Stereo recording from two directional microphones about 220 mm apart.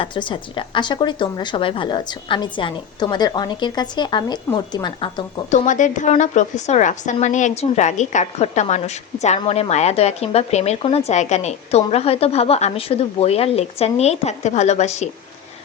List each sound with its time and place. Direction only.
0.0 s a woman's voice: 20° left (ahead or behind)
5.5 s a woman's voice: 35° left (ahead or behind)